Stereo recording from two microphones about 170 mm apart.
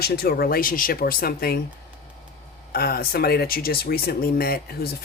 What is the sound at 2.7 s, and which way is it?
Speech, 60° left (ahead or behind).